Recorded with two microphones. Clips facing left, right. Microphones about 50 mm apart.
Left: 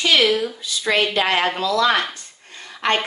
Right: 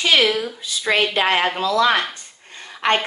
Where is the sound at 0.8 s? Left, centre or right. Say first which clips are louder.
Even; centre.